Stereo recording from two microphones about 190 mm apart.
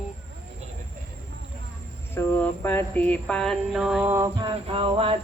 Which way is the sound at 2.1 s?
10° left (ahead or behind).